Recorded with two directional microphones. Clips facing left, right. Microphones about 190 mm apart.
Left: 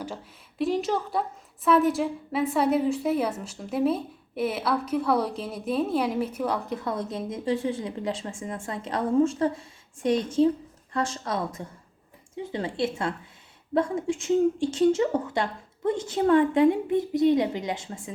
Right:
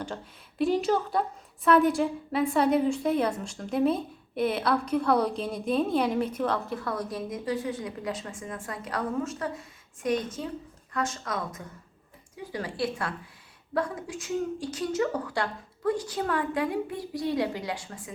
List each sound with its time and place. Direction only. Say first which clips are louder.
0.6 s a woman's voice: right 1 dB; centre (ahead or behind); by 18.1 s 25° left (ahead or behind)